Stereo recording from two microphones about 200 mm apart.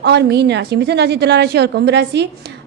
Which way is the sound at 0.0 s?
55° right (ahead or behind).